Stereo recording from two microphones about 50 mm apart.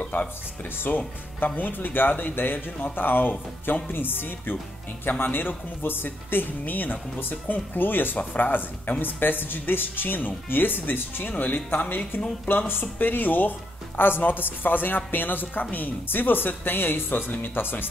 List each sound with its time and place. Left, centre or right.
0.1 s speech: left
12.4 s speech: left